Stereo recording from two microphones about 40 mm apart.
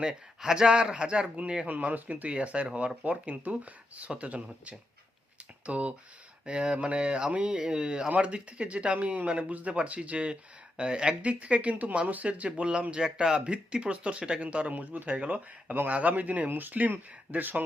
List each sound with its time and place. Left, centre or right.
0.1 s speech: centre
1.6 s speech: right
5.6 s speech: right
14.4 s speech: right
16.5 s speech: right